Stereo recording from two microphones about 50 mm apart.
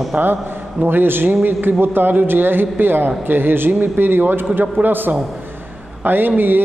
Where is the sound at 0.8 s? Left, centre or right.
Right.